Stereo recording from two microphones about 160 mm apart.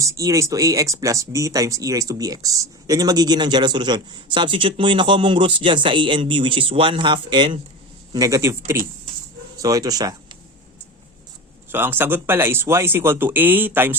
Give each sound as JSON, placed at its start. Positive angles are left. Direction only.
{"t": 0.0, "sound": "speech", "side_deg": -20}
{"t": 8.1, "sound": "speech", "side_deg": -20}
{"t": 11.7, "sound": "speech", "side_deg": -15}